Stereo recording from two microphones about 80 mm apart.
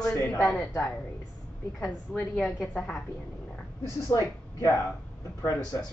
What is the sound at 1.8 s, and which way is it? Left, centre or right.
Speech, centre.